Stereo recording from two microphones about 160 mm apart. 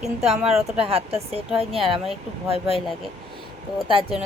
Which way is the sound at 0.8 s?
40° right (ahead or behind).